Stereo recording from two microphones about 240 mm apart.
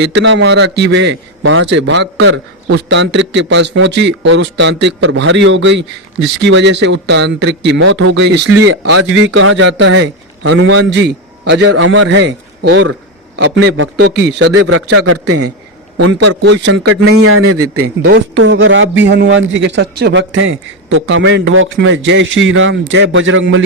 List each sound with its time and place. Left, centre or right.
0.0 s speech: right
8.8 s a man's voice: right
9.1 s speech: right
14.9 s a man's voice: right
16.0 s a man's voice: right
16.6 s speech: right
17.2 s a man's voice: right
18.1 s speech: right